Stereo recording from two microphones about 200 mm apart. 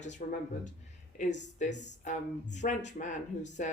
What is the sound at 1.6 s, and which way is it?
Speech, 35° left (ahead or behind).